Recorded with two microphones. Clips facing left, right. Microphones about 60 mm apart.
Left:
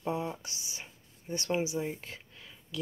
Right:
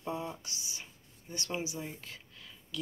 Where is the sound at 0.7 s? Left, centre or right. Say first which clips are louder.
Left 2 dB; left.